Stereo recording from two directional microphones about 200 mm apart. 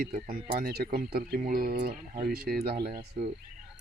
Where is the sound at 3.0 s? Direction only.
35° right (ahead or behind).